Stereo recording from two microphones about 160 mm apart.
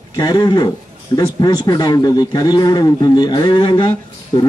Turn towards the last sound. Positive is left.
turn(degrees=25)  # may be behind; listen again after turning